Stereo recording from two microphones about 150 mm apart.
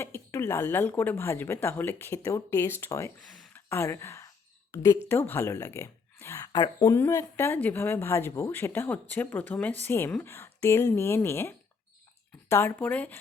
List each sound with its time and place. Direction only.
0.0 s speech: 15° left (ahead or behind)
3.5 s gasp: 15° left (ahead or behind)
4.7 s a woman's voice: 20° left (ahead or behind)
6.5 s speech: 30° left (ahead or behind); by 13.1 s 10° left (ahead or behind)